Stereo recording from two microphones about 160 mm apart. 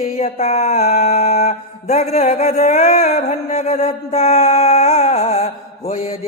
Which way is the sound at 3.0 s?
45° left (ahead or behind).